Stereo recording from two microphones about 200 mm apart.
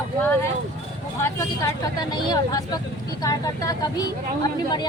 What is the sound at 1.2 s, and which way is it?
A woman's voice, 15° left (ahead or behind).